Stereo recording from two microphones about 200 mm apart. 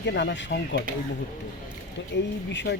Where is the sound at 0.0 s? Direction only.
60° left (ahead or behind).